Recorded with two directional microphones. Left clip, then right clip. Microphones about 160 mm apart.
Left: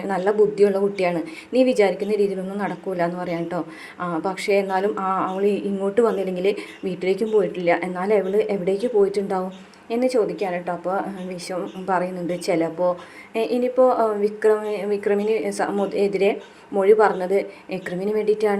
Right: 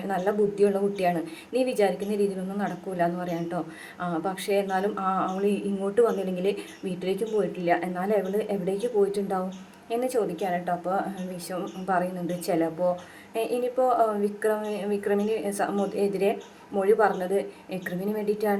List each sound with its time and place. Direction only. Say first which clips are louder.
0.0 s a woman's voice: left 6 dB; 20° left (ahead or behind)
12.5 s a woman's voice: left 4 dB; 20° left (ahead or behind)